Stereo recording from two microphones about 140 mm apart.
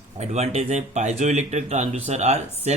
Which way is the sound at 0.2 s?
50° right (ahead or behind).